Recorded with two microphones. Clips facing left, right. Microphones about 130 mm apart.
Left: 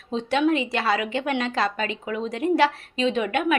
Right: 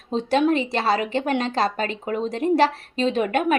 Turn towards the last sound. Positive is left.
turn(degrees=-40)  # may be behind; listen again after turning